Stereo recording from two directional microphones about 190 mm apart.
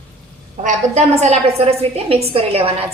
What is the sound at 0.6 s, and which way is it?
A woman's voice, 40° right (ahead or behind).